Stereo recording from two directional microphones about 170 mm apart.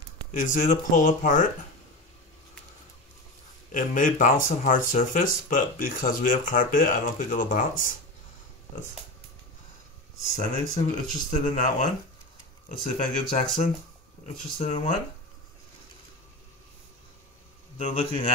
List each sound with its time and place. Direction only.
0.3 s speech: 50° left (ahead or behind)
3.7 s speech: 50° left (ahead or behind)
10.3 s speech: 45° left (ahead or behind)
17.8 s speech: 45° left (ahead or behind)